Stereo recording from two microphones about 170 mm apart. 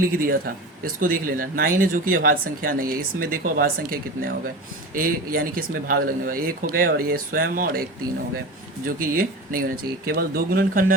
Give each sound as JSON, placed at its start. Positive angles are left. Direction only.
{"t": 0.2, "sound": "speech", "side_deg": -60}